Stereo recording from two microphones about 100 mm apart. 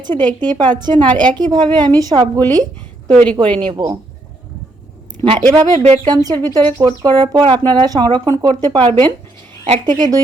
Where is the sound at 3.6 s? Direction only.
55° right (ahead or behind).